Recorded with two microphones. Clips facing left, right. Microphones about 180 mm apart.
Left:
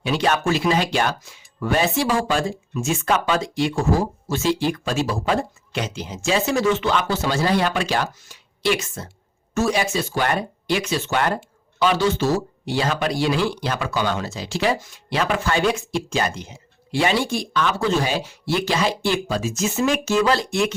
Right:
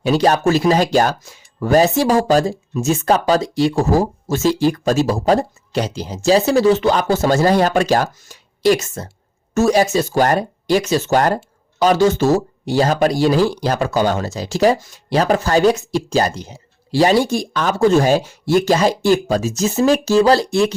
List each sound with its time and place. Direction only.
0.0 s speech: 40° right (ahead or behind)